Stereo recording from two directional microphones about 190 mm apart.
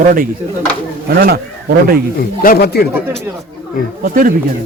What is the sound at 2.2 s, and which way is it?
Speech, 55° left (ahead or behind).